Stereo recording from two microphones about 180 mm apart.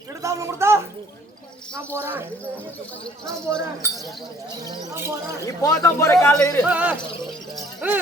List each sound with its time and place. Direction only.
0.2 s speech: 15° right (ahead or behind)
3.5 s speech: centre (ahead or behind)
4.6 s speech: 15° right (ahead or behind)
5.5 s speech: 15° left (ahead or behind)
6.7 s speech: 5° right (ahead or behind)